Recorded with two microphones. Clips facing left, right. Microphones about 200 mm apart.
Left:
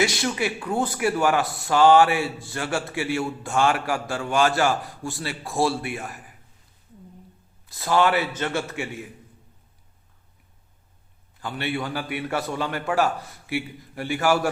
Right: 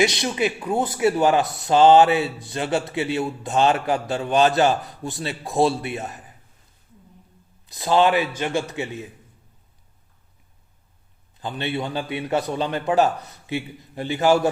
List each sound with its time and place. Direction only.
0.0 s speech: 20° right (ahead or behind)
7.7 s speech: 20° right (ahead or behind)
11.3 s speech: 20° right (ahead or behind)